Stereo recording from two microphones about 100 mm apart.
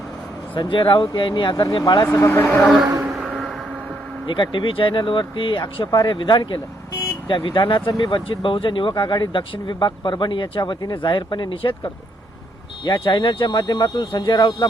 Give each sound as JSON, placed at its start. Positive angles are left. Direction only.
{"t": 0.5, "sound": "speech", "side_deg": 55}
{"t": 2.0, "sound": "speech", "side_deg": 25}
{"t": 2.6, "sound": "a sound", "side_deg": 0}
{"t": 4.3, "sound": "speech", "side_deg": 55}